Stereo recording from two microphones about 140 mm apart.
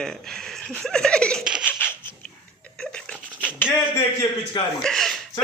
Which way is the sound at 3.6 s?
15° left (ahead or behind).